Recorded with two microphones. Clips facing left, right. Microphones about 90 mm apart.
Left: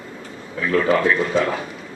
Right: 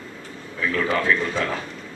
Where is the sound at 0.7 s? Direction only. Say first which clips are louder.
Left 5 dB; 15° left (ahead or behind).